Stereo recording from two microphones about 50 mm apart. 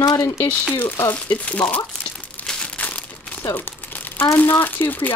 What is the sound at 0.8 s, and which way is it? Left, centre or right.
Speech, left.